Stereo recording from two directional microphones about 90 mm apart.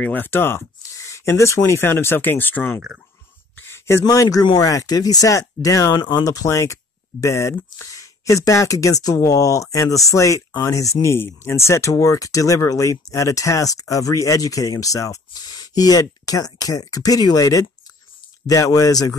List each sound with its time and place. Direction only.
0.0 s speech: 20° left (ahead or behind)
3.5 s a sound: 30° left (ahead or behind)
4.0 s speech: 40° left (ahead or behind)